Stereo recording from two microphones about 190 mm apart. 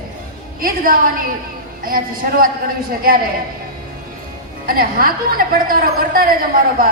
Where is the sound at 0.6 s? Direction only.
50° right (ahead or behind).